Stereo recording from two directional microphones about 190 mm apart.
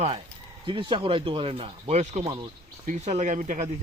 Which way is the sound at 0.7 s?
25° right (ahead or behind).